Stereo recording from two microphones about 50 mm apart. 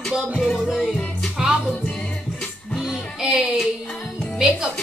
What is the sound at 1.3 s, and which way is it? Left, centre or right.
Music, centre.